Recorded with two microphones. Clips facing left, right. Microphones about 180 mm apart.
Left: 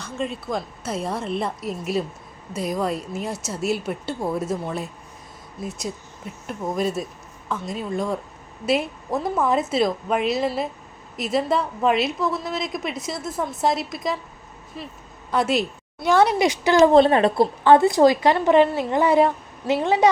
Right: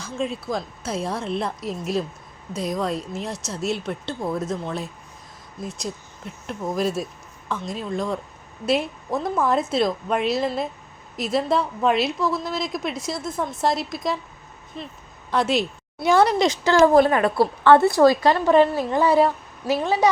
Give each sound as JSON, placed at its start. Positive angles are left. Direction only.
{"t": 0.0, "sound": "a woman's voice", "side_deg": 0}